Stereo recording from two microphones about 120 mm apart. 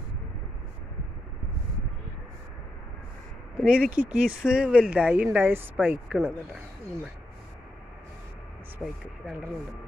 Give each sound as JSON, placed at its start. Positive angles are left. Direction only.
{"t": 3.5, "sound": "speech", "side_deg": -10}
{"t": 6.1, "sound": "speech", "side_deg": 0}
{"t": 8.8, "sound": "speech", "side_deg": 0}